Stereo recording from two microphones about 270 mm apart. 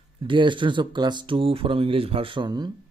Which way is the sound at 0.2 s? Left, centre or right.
Centre.